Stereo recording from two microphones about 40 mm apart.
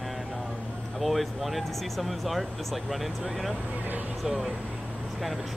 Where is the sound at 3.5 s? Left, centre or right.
Right.